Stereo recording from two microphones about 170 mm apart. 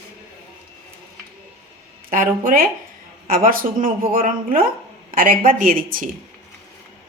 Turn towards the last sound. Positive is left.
turn(degrees=-55)  # may be behind; listen again after turning